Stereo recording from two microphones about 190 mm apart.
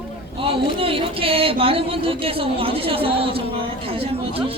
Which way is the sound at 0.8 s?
30° right (ahead or behind).